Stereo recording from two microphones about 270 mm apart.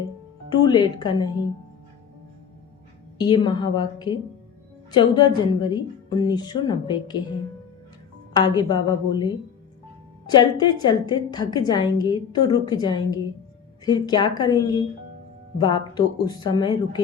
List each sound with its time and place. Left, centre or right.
0.6 s a woman's voice: centre
3.2 s a woman's voice: centre
8.3 s a woman's voice: centre